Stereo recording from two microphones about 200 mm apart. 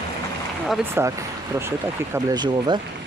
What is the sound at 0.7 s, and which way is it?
Speech, 10° right (ahead or behind).